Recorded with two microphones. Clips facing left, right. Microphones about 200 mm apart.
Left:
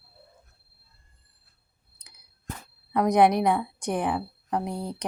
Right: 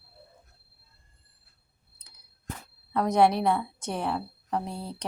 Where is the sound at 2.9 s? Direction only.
15° left (ahead or behind).